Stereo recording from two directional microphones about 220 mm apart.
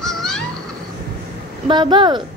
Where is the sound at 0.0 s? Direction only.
Centre (ahead or behind).